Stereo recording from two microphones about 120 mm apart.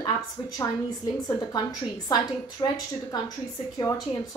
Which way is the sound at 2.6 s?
35° left (ahead or behind).